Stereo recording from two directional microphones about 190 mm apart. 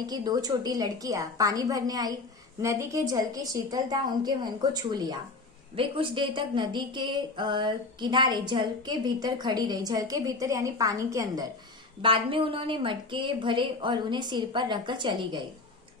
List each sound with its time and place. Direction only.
0.0 s a woman's voice: 20° right (ahead or behind)
12.0 s a woman's voice: 25° right (ahead or behind)